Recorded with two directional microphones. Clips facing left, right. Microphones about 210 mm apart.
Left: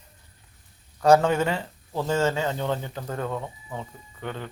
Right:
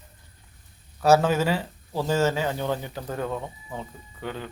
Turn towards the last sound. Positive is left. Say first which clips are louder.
# even
turn(degrees=-10)  # may be behind; listen again after turning